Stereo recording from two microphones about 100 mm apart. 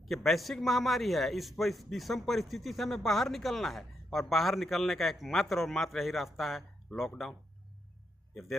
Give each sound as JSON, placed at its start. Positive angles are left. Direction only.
{"t": 0.0, "sound": "a man's voice", "side_deg": 0}